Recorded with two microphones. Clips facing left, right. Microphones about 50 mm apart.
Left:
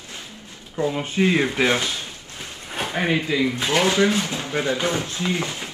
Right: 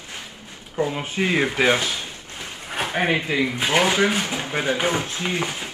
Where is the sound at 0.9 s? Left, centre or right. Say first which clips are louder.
Left 6 dB; centre.